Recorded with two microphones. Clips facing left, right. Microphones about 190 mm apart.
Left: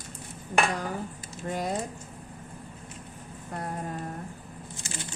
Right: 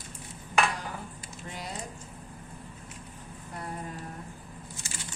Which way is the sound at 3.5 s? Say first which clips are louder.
Left 4 dB; 45° left (ahead or behind).